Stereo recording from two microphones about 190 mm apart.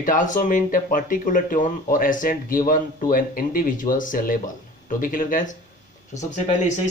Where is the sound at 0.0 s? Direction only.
45° left (ahead or behind).